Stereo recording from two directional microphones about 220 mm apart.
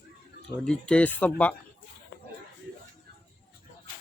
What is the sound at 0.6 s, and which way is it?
Speech, 5° left (ahead or behind).